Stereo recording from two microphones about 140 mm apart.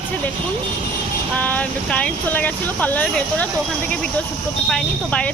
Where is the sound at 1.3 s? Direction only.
10° left (ahead or behind).